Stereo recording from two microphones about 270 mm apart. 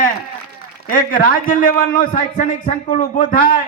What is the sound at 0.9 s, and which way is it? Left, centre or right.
A man's voice, left.